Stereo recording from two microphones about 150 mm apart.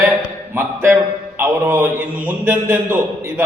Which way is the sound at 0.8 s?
15° right (ahead or behind).